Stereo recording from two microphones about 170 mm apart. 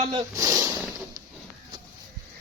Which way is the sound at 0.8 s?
5° right (ahead or behind).